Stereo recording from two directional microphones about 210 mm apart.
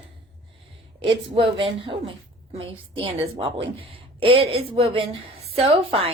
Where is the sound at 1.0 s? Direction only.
25° right (ahead or behind).